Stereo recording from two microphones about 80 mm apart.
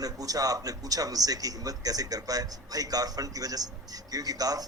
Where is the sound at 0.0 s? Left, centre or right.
Right.